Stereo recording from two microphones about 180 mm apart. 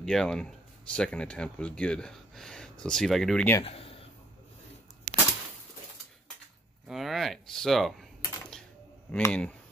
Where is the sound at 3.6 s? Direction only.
30° left (ahead or behind).